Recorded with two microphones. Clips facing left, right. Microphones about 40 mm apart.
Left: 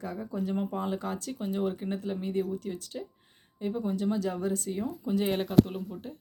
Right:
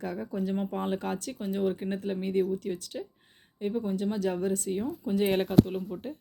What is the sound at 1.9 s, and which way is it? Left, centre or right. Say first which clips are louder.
Speech: right 2 dB; right.